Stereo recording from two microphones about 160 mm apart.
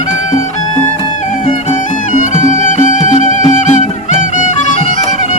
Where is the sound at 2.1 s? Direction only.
50° left (ahead or behind).